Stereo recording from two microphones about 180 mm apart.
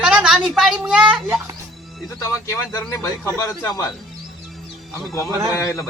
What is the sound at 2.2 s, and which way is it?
A man's voice, 15° left (ahead or behind).